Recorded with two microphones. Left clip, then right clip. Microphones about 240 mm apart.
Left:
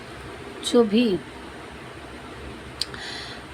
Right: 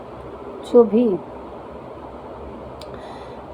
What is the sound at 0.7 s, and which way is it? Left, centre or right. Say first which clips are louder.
Speech: right 6 dB; left.